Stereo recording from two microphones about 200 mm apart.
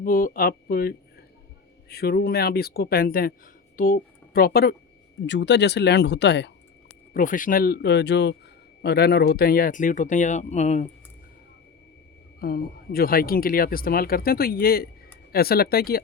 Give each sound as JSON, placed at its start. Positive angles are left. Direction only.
{"t": 0.0, "sound": "speech", "side_deg": 45}
{"t": 5.2, "sound": "speech", "side_deg": 60}
{"t": 7.1, "sound": "speech", "side_deg": 40}
{"t": 12.4, "sound": "speech", "side_deg": 50}